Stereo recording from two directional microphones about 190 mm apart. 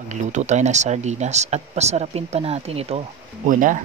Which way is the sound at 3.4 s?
45° right (ahead or behind).